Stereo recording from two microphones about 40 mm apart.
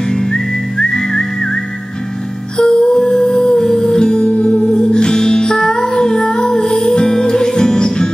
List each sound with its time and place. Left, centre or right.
0.1 s whistling: centre
2.5 s music: centre